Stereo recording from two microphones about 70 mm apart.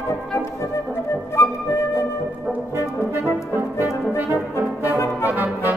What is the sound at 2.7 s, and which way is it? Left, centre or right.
Brass instrument, right.